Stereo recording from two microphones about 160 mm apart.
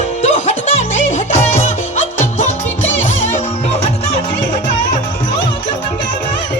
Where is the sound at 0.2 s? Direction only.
45° left (ahead or behind).